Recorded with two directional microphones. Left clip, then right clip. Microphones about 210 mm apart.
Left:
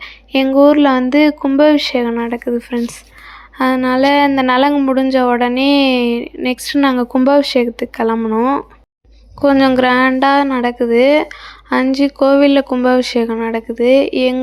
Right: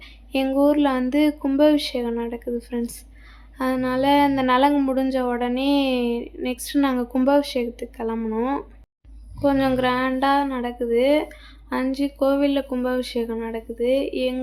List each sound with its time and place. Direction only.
0.0 s speech: 20° left (ahead or behind)
4.7 s speech: 5° left (ahead or behind)
4.9 s a woman's voice: 15° left (ahead or behind)
8.2 s speech: 10° left (ahead or behind)
9.4 s a woman's voice: 25° left (ahead or behind)